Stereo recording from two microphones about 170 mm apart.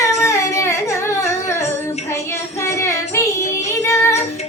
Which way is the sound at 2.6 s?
15° left (ahead or behind).